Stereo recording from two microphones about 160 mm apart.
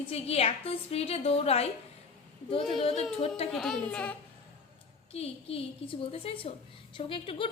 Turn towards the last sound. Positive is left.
turn(degrees=30)  # may be behind; listen again after turning